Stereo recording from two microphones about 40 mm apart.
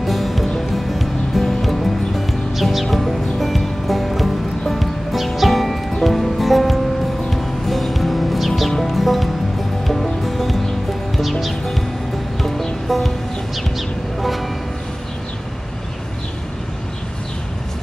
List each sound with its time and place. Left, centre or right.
0.0 s music: centre